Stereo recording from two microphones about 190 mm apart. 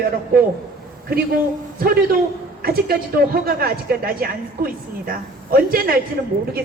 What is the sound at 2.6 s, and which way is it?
A woman's voice, 50° right (ahead or behind).